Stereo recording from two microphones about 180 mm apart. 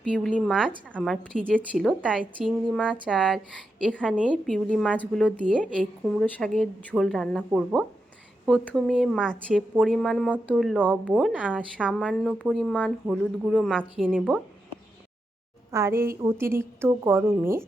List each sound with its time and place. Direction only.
0.1 s a woman's voice: centre (ahead or behind)
2.0 s a woman's voice: 5° right (ahead or behind)
11.9 s a woman's voice: 5° left (ahead or behind)
13.1 s a woman's voice: 5° right (ahead or behind)
13.6 s a woman's voice: 5° left (ahead or behind)
15.7 s a woman's voice: 15° right (ahead or behind)